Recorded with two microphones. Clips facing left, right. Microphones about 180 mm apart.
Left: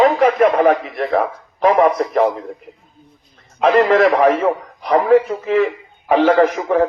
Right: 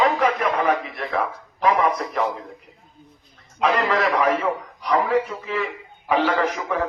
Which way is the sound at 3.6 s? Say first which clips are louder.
Left 8 dB; 45° left (ahead or behind).